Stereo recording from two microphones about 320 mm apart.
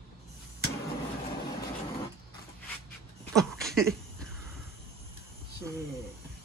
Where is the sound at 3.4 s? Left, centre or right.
Centre.